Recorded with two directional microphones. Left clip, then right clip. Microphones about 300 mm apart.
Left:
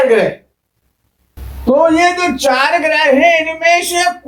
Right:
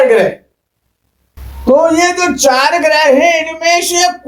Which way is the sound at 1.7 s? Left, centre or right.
Centre.